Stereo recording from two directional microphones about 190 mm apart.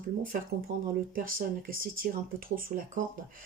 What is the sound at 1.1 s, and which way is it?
Speech, 50° right (ahead or behind).